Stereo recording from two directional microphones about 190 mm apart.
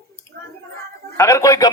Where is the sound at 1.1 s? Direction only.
15° left (ahead or behind).